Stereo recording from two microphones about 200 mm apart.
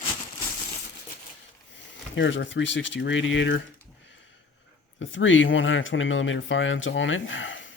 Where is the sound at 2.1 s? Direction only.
65° left (ahead or behind).